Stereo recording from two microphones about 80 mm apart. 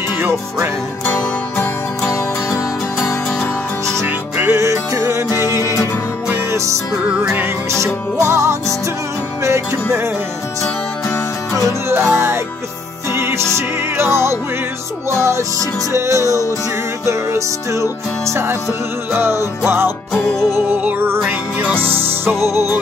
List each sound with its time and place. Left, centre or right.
1.0 s music: left
3.3 s music: centre
4.5 s music: right
7.7 s music: right
11.9 s music: right
22.4 s music: left